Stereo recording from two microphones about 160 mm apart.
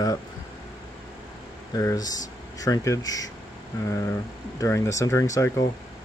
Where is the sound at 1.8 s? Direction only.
20° left (ahead or behind).